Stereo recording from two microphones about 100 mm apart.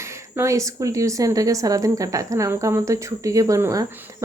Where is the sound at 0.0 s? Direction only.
30° right (ahead or behind).